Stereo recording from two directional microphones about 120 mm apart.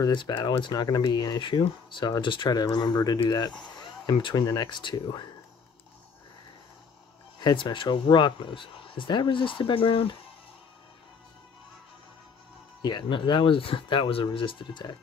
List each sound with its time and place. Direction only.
0.0 s speech: 40° left (ahead or behind)
7.3 s speech: 35° left (ahead or behind)
12.8 s speech: 40° left (ahead or behind)